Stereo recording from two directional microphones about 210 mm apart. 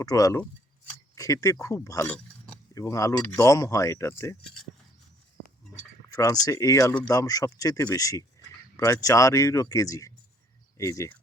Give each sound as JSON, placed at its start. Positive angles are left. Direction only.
{"t": 0.0, "sound": "speech", "side_deg": 15}
{"t": 6.1, "sound": "speech", "side_deg": 15}